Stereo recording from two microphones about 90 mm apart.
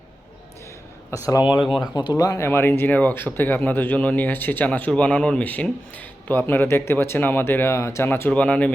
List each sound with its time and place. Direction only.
1.1 s speech: 30° left (ahead or behind)
2.0 s speech: 50° left (ahead or behind)
2.4 s speech: 30° left (ahead or behind)
8.3 s speech: 15° left (ahead or behind)